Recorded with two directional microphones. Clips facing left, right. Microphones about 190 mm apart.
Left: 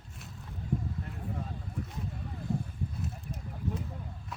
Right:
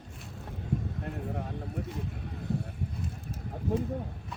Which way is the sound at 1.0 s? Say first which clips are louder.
Right 4 dB; 65° right (ahead or behind).